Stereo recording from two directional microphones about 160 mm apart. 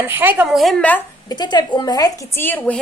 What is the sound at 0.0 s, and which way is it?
Speech, 15° right (ahead or behind).